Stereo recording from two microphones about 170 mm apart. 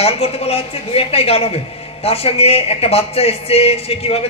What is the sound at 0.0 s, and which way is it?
Speech, 35° left (ahead or behind).